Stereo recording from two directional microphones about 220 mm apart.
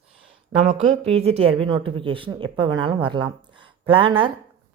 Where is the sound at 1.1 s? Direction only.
25° right (ahead or behind).